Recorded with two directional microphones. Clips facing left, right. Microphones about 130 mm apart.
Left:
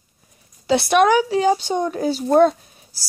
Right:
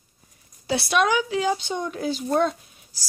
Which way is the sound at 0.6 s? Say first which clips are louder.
Left 6 dB; 55° left (ahead or behind).